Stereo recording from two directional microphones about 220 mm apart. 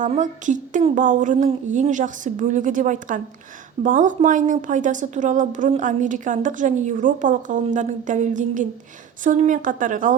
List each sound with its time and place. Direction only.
0.0 s a woman's voice: 35° right (ahead or behind)